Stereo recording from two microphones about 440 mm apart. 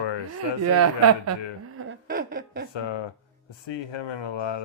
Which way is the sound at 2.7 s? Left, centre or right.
Left.